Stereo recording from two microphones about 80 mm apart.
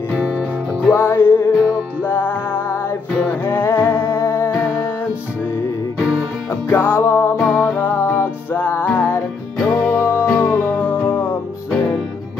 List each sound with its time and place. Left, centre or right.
0.9 s music: left
6.7 s music: left